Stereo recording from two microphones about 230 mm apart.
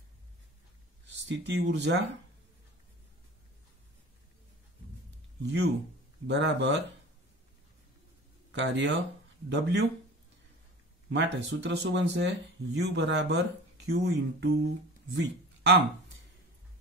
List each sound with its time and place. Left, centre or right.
1.0 s speech: right
5.4 s speech: right
8.5 s speech: right
11.1 s speech: right
15.0 s a sound: right